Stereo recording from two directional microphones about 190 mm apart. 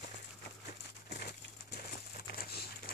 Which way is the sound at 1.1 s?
60° left (ahead or behind).